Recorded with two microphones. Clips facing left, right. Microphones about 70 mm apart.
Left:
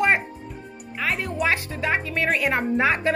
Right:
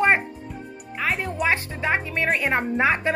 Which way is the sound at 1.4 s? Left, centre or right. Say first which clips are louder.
Right 1 dB; right.